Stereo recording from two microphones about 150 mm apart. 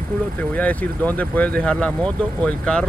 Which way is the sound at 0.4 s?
10° left (ahead or behind).